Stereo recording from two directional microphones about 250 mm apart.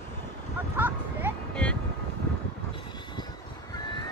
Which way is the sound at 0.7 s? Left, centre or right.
Centre.